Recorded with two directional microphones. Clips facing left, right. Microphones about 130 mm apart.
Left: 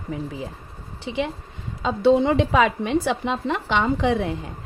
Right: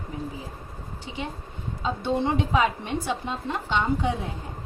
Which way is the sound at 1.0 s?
90° left.